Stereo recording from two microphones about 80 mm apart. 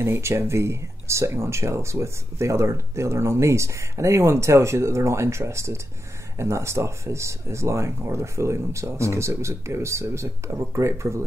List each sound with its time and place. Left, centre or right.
0.0 s speech: right